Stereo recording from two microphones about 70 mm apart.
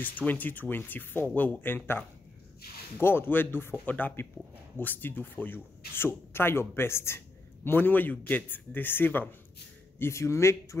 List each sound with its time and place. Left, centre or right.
0.0 s a man's voice: left
3.0 s a man's voice: left
9.9 s speech: left